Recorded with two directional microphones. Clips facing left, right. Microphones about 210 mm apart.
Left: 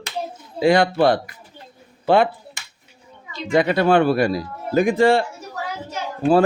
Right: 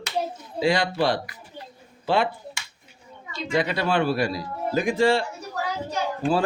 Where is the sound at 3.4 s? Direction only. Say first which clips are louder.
Left 7 dB; 55° left (ahead or behind).